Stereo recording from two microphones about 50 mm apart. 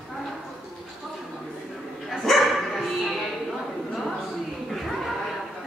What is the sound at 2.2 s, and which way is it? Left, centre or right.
Dog, centre.